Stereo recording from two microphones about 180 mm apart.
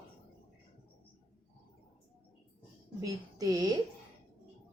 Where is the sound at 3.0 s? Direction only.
20° right (ahead or behind).